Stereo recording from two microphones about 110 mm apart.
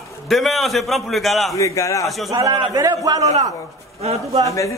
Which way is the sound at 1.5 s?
30° left (ahead or behind).